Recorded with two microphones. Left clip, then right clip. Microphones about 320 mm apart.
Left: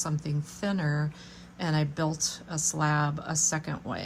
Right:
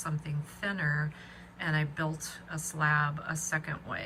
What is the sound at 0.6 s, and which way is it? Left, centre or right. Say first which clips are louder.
Speech: even; centre.